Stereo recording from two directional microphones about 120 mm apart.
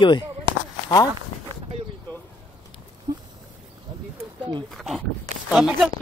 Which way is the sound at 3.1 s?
30° right (ahead or behind).